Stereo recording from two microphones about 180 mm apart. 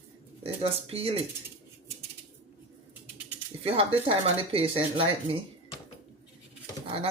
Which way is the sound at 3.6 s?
30° right (ahead or behind).